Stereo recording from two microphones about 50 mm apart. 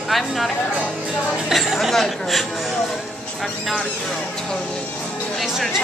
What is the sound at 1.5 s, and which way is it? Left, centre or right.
Speech, centre.